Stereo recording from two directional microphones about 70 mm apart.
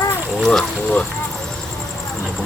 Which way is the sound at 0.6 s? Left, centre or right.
Centre.